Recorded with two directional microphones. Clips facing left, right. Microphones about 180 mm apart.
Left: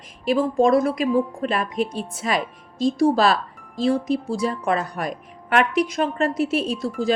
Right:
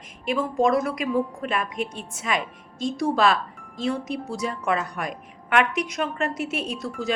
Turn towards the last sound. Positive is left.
turn(degrees=30)  # may be behind; listen again after turning